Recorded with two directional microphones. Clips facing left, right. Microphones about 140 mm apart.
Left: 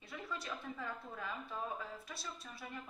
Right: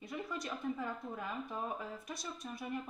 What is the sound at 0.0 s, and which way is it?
Speech, 20° right (ahead or behind).